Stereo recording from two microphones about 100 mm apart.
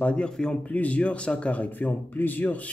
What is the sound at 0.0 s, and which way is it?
Speech, 10° left (ahead or behind).